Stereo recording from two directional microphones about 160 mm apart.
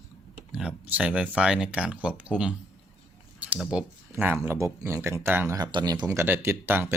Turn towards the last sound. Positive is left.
turn(degrees=-15)  # may be behind; listen again after turning